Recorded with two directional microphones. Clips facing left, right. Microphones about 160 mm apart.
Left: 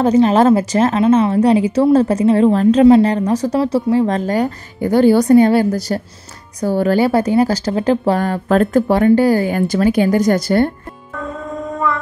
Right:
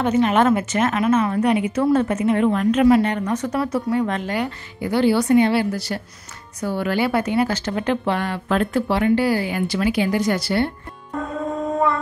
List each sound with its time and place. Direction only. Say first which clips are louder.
0.0 s speech: left 6 dB; 35° left (ahead or behind)